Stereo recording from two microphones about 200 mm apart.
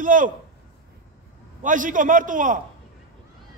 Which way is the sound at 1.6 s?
40° right (ahead or behind).